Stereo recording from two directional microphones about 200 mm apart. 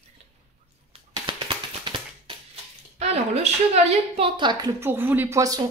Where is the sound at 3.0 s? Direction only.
30° right (ahead or behind).